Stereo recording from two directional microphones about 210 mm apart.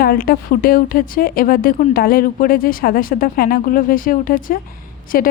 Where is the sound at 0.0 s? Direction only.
45° left (ahead or behind).